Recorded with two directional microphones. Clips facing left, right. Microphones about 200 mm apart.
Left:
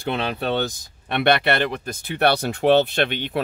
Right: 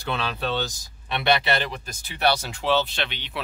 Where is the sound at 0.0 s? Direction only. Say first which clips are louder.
Left 4 dB; 55° left (ahead or behind).